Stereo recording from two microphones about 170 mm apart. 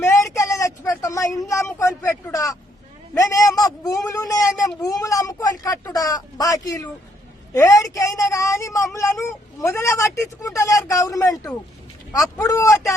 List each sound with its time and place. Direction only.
0.0 s vehicle: 15° left (ahead or behind)
2.0 s a woman's voice: 15° left (ahead or behind)